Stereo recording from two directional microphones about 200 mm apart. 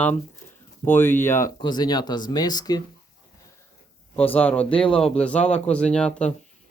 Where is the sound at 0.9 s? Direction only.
10° left (ahead or behind).